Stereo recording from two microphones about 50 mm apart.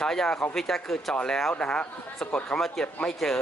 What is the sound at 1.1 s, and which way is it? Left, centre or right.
A man's voice, centre.